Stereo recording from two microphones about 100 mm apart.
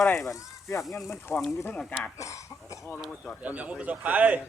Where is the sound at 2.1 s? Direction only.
30° left (ahead or behind).